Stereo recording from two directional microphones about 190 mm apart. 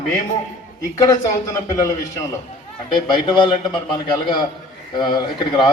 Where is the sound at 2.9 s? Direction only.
25° left (ahead or behind).